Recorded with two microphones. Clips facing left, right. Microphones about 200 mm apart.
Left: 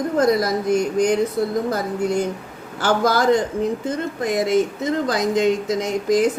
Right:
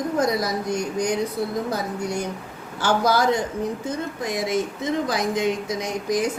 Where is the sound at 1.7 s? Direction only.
55° left (ahead or behind).